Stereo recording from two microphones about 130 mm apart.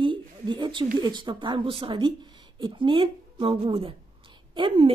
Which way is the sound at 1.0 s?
35° right (ahead or behind).